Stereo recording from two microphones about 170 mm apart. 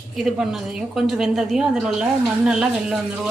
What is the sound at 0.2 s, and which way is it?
A woman's voice, centre (ahead or behind).